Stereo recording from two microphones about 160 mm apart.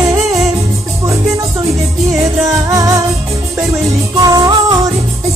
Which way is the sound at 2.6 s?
20° right (ahead or behind).